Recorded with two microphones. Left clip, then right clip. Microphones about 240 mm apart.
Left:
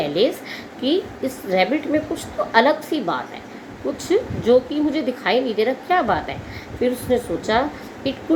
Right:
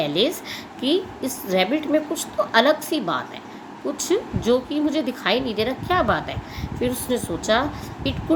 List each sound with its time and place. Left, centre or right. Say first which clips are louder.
0.0 s a woman's voice: left 2 dB; right